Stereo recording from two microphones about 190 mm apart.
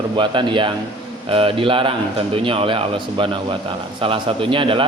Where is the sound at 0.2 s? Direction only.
25° right (ahead or behind).